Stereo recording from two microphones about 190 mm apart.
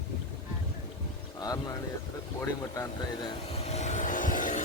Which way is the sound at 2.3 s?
15° left (ahead or behind).